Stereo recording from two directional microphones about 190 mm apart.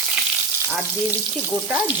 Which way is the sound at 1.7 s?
5° right (ahead or behind).